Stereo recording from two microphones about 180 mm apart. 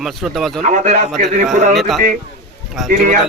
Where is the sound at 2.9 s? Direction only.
45° right (ahead or behind).